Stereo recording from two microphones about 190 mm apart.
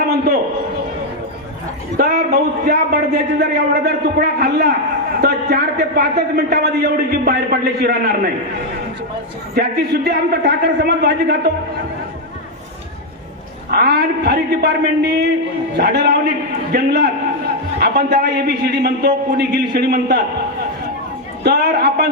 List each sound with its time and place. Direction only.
2.0 s a man's voice: 55° right (ahead or behind)
9.6 s a man's voice: 60° right (ahead or behind)
13.7 s a man's voice: 55° right (ahead or behind)
21.4 s a man's voice: 60° right (ahead or behind)